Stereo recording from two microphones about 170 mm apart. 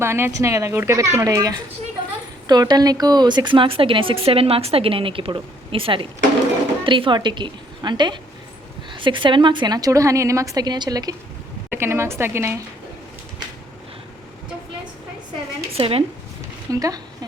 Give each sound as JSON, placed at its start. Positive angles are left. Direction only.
{"t": 0.0, "sound": "a woman's voice", "side_deg": -15}
{"t": 15.8, "sound": "a woman's voice", "side_deg": -35}
{"t": 16.7, "sound": "a woman's voice", "side_deg": -20}